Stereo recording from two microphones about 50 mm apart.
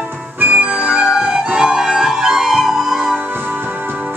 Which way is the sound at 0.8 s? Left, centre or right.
Centre.